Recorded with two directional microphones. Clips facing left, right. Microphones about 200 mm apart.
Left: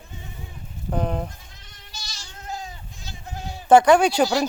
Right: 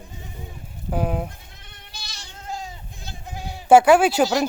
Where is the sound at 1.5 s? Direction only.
60° right (ahead or behind).